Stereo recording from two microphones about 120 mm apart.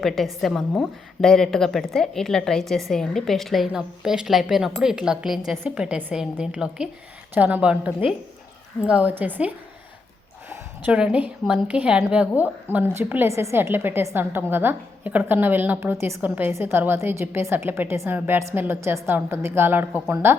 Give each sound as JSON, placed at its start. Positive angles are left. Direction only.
{"t": 0.0, "sound": "a woman's voice", "side_deg": 0}
{"t": 10.5, "sound": "a sound", "side_deg": -10}
{"t": 11.4, "sound": "a woman's voice", "side_deg": -10}